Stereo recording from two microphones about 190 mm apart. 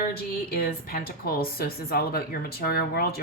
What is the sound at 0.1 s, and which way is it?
A woman's voice, 50° left (ahead or behind).